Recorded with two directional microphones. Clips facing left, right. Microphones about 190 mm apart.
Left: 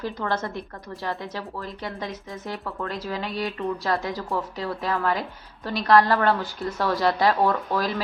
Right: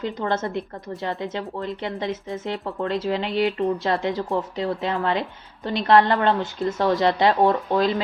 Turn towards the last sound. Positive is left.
turn(degrees=-20)  # may be behind; listen again after turning